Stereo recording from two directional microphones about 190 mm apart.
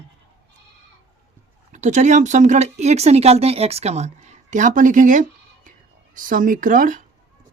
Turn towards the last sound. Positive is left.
turn(degrees=-45)  # may be behind; listen again after turning